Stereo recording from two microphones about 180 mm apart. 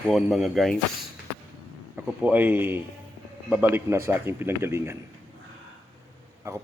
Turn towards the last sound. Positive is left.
turn(degrees=-15)  # may be behind; listen again after turning